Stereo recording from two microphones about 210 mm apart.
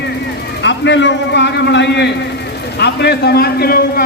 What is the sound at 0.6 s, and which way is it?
A man's voice, 55° left (ahead or behind).